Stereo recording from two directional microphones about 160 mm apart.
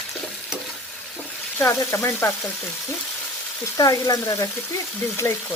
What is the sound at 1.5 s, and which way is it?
Speech, 15° left (ahead or behind).